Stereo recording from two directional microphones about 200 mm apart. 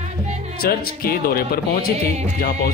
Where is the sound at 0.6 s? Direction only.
50° left (ahead or behind).